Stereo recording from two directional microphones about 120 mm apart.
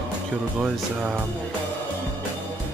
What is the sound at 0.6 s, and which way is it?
Speech, 5° right (ahead or behind).